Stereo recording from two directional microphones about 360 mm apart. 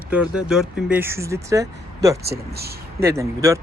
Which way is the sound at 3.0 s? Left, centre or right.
Centre.